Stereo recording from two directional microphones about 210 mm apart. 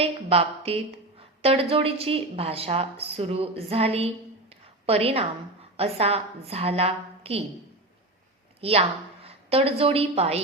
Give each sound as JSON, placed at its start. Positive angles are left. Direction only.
{"t": 0.0, "sound": "a woman's voice", "side_deg": -30}
{"t": 9.2, "sound": "a woman's voice", "side_deg": -25}